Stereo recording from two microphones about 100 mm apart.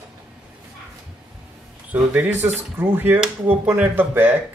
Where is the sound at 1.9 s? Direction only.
15° right (ahead or behind).